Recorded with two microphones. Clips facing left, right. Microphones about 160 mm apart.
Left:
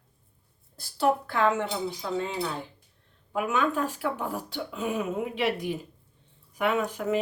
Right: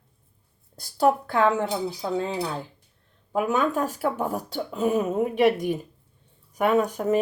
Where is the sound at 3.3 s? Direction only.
40° right (ahead or behind).